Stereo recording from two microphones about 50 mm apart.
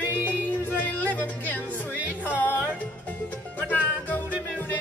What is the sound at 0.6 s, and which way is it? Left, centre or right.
Speech, left.